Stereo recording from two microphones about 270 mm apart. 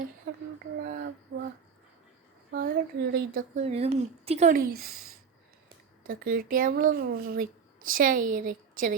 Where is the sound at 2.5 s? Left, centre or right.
Right.